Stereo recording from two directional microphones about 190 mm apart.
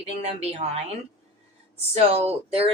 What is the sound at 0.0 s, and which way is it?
Speech, 35° right (ahead or behind).